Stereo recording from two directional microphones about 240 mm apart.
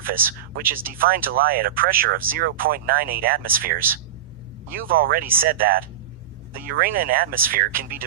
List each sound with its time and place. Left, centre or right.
0.0 s speech: right